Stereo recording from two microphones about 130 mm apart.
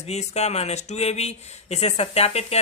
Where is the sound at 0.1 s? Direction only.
55° left (ahead or behind).